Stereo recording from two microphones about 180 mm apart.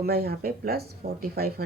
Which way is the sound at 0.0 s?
60° right (ahead or behind).